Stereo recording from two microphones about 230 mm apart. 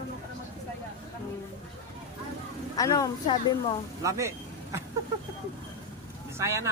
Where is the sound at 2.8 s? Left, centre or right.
Centre.